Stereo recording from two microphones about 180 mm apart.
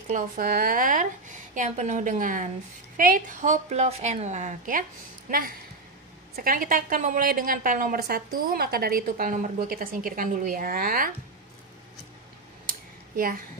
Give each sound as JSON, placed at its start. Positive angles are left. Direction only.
{"t": 0.1, "sound": "a woman's voice", "side_deg": -55}
{"t": 6.3, "sound": "a woman's voice", "side_deg": -55}
{"t": 13.1, "sound": "a woman's voice", "side_deg": -55}